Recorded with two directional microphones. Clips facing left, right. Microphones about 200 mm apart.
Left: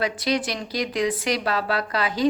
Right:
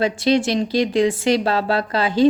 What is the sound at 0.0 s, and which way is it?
Speech, 25° right (ahead or behind).